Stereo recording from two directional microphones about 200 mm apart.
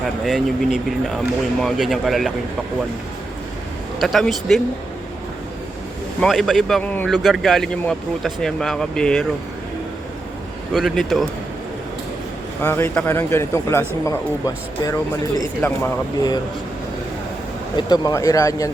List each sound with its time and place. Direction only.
0.3 s speech: centre (ahead or behind)
4.0 s speech: centre (ahead or behind)
6.1 s speech: centre (ahead or behind)
10.7 s speech: centre (ahead or behind)
12.6 s a man's voice: 10° left (ahead or behind)
17.7 s a man's voice: 20° left (ahead or behind)